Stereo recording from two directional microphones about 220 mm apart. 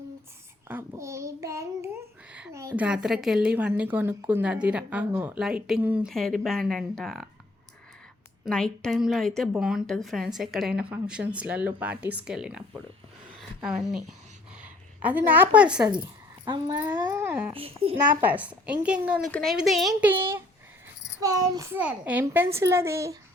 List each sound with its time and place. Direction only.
0.7 s child singing: 10° right (ahead or behind)
2.3 s a woman's voice: 10° right (ahead or behind)
8.4 s a woman's voice: 5° left (ahead or behind)
17.5 s a child's voice: 25° right (ahead or behind)
18.2 s a woman's voice: 5° right (ahead or behind)